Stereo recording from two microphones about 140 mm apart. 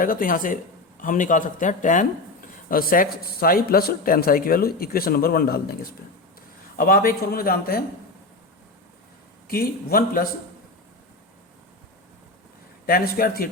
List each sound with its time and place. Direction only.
0.0 s a man's voice: 80° left; by 2.0 s 65° left (ahead or behind)
2.6 s speech: 90° left
9.5 s speech: 90° left
12.8 s speech: 90° left